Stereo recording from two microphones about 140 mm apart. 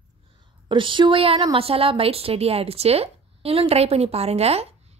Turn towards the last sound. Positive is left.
turn(degrees=-50)  # may be behind; listen again after turning